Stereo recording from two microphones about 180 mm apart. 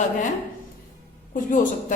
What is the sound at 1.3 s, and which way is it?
Speech, 50° left (ahead or behind).